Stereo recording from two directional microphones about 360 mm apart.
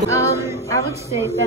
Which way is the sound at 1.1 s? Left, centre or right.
Centre.